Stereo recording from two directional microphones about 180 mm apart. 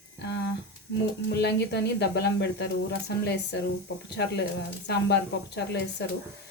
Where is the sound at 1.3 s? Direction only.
70° left (ahead or behind).